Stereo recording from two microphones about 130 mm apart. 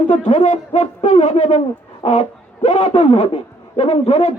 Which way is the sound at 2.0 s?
50° left (ahead or behind).